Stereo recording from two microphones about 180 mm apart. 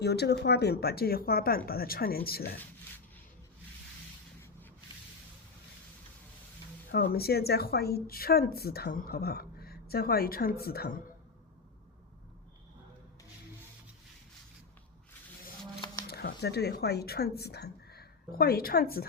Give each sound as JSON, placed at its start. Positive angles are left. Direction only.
{"t": 0.0, "sound": "speech", "side_deg": 65}
{"t": 6.9, "sound": "speech", "side_deg": 60}
{"t": 16.0, "sound": "speech", "side_deg": 60}